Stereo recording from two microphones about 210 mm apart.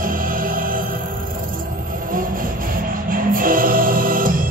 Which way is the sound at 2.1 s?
40° right (ahead or behind).